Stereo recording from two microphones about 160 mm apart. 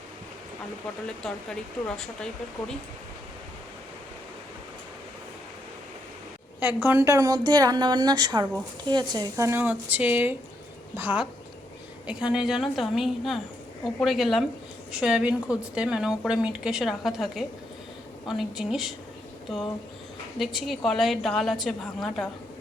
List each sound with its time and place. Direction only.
1.0 s a woman's voice: 5° left (ahead or behind)
6.8 s a woman's voice: 15° right (ahead or behind)
20.4 s a woman's voice: centre (ahead or behind)